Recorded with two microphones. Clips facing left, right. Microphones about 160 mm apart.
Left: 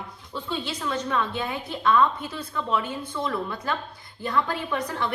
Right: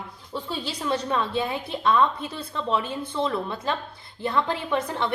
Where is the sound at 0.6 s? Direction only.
30° right (ahead or behind).